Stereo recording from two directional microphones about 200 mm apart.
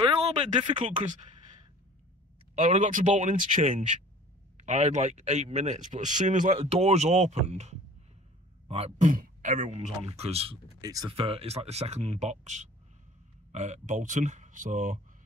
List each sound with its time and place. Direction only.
0.0 s a sound: 25° right (ahead or behind)
0.8 s speech: 35° right (ahead or behind)
2.5 s speech: 35° right (ahead or behind)